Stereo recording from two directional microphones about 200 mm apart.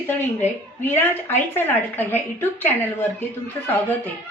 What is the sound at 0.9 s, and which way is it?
A woman's voice, 10° left (ahead or behind).